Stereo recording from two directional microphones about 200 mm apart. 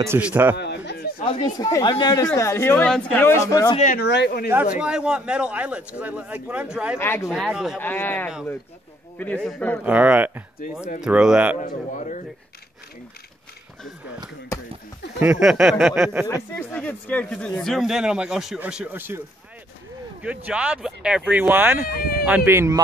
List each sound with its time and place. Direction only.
0.0 s speech: 10° right (ahead or behind)
0.6 s a sound: 55° left (ahead or behind)
1.2 s speech: 25° left (ahead or behind)
3.7 s a man's voice: 40° left (ahead or behind)
4.0 s speech: 55° left (ahead or behind)
4.7 s speech: 5° right (ahead or behind)
7.0 s speech: 10° left (ahead or behind)
7.2 s speech: 5° right (ahead or behind)
7.8 s speech: 10° left (ahead or behind)
9.8 s speech: 5° right (ahead or behind)
11.6 s a man's voice: 40° left (ahead or behind)
15.1 s speech: 5° right (ahead or behind)
16.5 s speech: 10° left (ahead or behind); by 22.8 s 15° right (ahead or behind)